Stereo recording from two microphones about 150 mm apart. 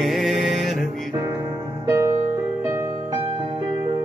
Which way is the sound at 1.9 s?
20° right (ahead or behind).